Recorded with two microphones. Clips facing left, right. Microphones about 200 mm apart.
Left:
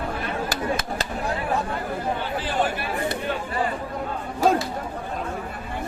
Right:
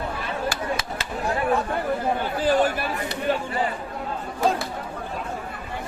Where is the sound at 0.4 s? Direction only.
40° left (ahead or behind).